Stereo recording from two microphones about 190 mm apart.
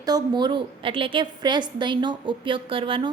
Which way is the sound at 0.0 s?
20° right (ahead or behind).